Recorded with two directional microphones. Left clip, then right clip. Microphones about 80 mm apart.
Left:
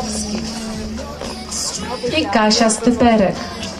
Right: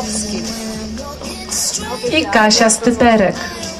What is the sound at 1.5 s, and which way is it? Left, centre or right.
Speech, right.